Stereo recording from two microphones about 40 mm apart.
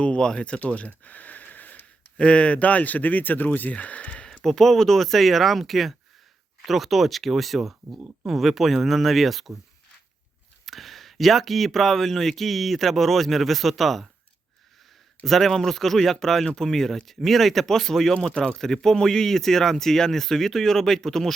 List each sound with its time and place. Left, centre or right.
0.0 s speech: left
0.6 s a sound: left
2.1 s speech: left
4.3 s speech: centre
10.7 s speech: centre
15.2 s speech: centre